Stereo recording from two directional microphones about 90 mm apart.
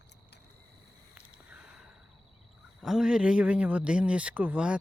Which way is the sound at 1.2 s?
15° right (ahead or behind).